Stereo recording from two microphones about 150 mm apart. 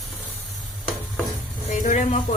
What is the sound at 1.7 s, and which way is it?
Speech, 55° left (ahead or behind).